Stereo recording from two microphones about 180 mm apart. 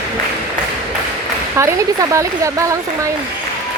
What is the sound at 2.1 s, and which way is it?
Speech, 15° right (ahead or behind).